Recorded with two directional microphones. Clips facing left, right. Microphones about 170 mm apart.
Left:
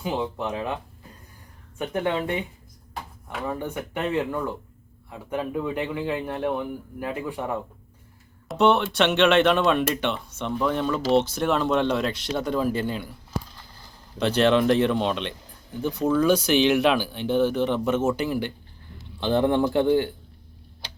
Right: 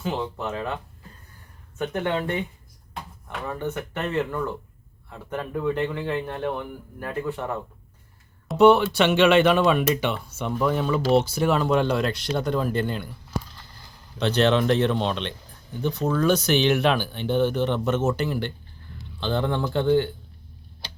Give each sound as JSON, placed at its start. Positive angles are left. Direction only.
{"t": 0.0, "sound": "a man's voice", "side_deg": 15}
{"t": 1.8, "sound": "a man's voice", "side_deg": 10}
{"t": 8.4, "sound": "a man's voice", "side_deg": 0}